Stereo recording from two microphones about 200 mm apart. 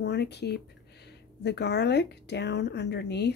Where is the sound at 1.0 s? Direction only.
55° left (ahead or behind).